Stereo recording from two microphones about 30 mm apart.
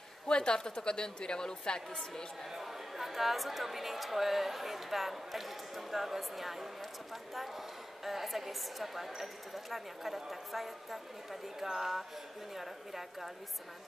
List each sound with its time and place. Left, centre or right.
0.3 s a woman's voice: left
2.5 s speech: centre
8.0 s a woman's voice: centre